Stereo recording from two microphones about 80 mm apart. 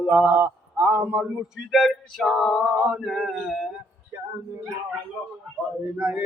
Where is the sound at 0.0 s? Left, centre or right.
Centre.